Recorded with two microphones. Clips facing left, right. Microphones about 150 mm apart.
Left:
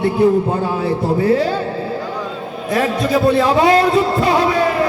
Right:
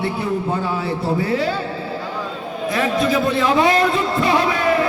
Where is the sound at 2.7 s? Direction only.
40° left (ahead or behind).